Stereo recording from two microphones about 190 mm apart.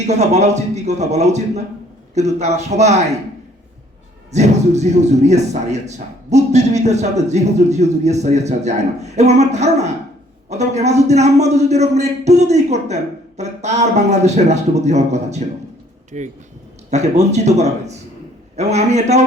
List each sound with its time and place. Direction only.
0.0 s speech: 35° right (ahead or behind)
4.3 s speech: 35° right (ahead or behind)